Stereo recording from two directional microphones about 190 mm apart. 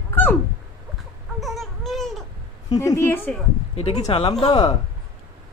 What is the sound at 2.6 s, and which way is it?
Speech, 20° left (ahead or behind).